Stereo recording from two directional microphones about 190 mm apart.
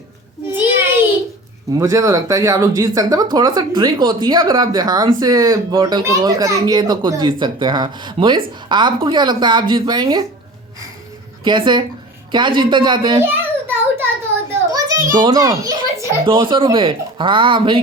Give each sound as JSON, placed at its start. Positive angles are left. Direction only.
{"t": 1.8, "sound": "speech", "side_deg": -15}
{"t": 11.4, "sound": "speech", "side_deg": -25}
{"t": 13.2, "sound": "a sound", "side_deg": -10}
{"t": 14.7, "sound": "a child's voice", "side_deg": -20}